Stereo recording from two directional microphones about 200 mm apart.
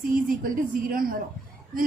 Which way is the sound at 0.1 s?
45° right (ahead or behind).